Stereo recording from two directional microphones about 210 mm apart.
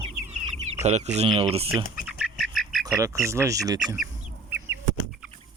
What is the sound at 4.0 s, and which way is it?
Chicken, 5° right (ahead or behind).